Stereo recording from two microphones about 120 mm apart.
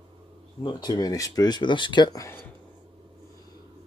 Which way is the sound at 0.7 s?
35° left (ahead or behind).